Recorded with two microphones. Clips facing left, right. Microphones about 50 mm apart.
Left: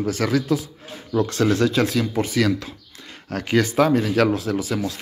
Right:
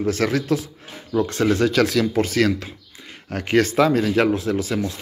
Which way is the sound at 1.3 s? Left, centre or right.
Right.